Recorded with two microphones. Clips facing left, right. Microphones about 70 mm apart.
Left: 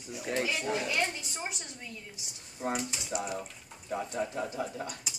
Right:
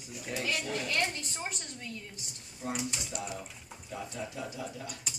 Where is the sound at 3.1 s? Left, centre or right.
Centre.